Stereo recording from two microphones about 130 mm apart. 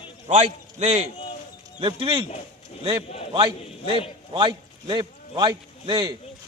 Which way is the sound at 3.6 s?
50° left (ahead or behind).